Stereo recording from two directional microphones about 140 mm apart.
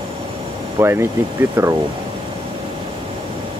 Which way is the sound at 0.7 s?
20° right (ahead or behind).